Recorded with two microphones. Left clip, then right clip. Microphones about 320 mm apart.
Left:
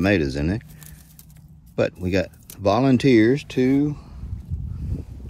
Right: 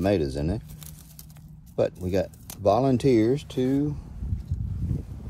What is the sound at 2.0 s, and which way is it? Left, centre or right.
Speech, left.